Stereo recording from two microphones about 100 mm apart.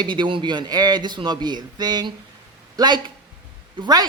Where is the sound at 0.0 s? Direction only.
50° right (ahead or behind).